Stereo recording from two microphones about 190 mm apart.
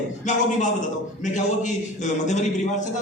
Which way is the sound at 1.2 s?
40° left (ahead or behind).